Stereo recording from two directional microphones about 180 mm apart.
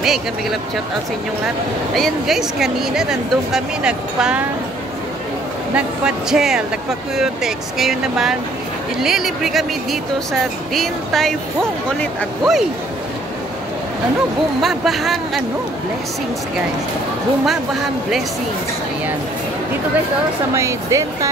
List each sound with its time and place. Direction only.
0.0 s speech: centre (ahead or behind)
2.0 s speech: centre (ahead or behind)
5.8 s speech: 5° right (ahead or behind)
14.6 s speech: centre (ahead or behind)
20.5 s speech: 15° right (ahead or behind)